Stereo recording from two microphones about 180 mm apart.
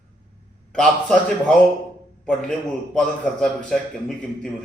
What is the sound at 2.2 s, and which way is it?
A man's voice, 5° left (ahead or behind).